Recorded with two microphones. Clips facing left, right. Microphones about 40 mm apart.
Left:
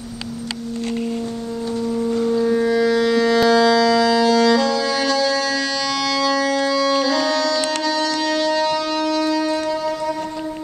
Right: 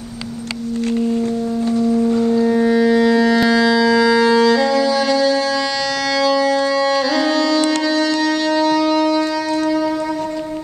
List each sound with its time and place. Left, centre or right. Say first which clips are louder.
2.0 s wind instrument: right 3 dB; right
3.4 s music: even; centre
8.5 s shofar: right 5 dB; centre